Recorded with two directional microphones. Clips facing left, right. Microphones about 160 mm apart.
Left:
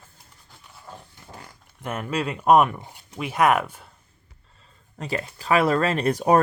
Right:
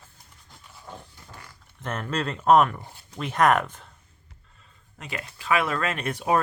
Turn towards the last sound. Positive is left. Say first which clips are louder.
# left 6 dB
turn(degrees=40)  # may be behind; listen again after turning